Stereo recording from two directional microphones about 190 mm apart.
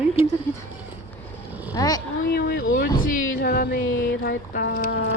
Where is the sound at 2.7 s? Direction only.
45° left (ahead or behind).